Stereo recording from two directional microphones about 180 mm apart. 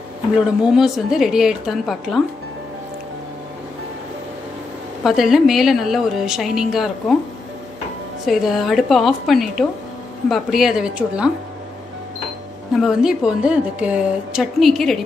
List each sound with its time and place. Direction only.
0.4 s a woman's voice: centre (ahead or behind)
5.0 s a woman's voice: centre (ahead or behind)
8.3 s a woman's voice: centre (ahead or behind)
12.7 s a woman's voice: centre (ahead or behind)